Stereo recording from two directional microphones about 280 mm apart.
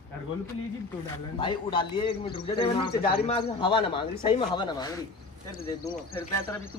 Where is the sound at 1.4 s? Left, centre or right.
Centre.